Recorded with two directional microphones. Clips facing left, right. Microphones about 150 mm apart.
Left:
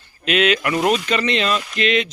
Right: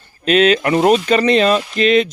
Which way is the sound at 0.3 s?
35° right (ahead or behind).